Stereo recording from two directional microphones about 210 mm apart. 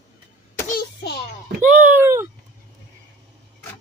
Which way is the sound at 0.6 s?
50° left (ahead or behind).